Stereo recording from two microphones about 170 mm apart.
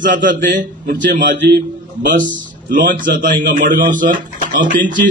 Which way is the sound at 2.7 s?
50° right (ahead or behind).